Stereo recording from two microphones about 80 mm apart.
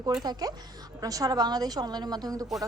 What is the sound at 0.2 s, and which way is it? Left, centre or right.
A woman's voice, right.